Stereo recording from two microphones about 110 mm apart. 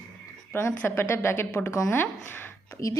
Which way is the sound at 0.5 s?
20° left (ahead or behind).